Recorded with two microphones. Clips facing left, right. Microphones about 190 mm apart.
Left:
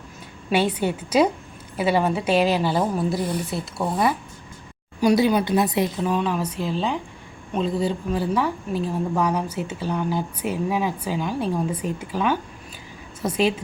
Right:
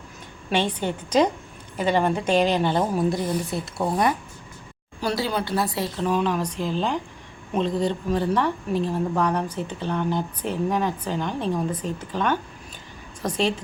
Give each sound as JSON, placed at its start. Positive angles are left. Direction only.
{"t": 0.5, "sound": "a woman's voice", "side_deg": 10}
{"t": 4.9, "sound": "speech", "side_deg": 15}
{"t": 6.0, "sound": "a woman's voice", "side_deg": 5}